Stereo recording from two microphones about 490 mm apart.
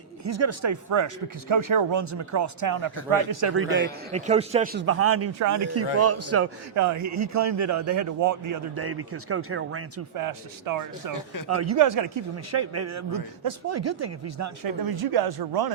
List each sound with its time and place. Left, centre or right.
0.3 s speech: right
1.9 s speech: right
3.5 s a man's voice: right
8.8 s a man's voice: right
10.2 s speech: right